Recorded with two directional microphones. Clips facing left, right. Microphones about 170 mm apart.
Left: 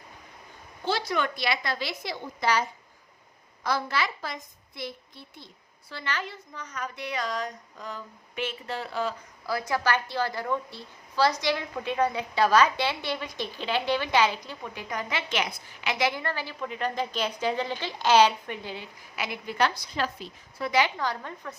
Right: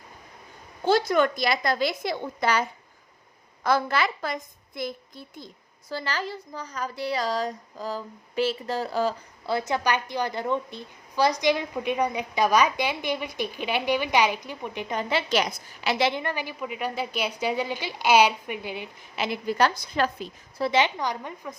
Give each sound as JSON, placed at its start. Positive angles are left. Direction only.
{"t": 0.9, "sound": "a woman's voice", "side_deg": -45}
{"t": 9.5, "sound": "a woman's voice", "side_deg": -25}
{"t": 19.1, "sound": "speech", "side_deg": -30}
{"t": 20.6, "sound": "a woman's voice", "side_deg": -25}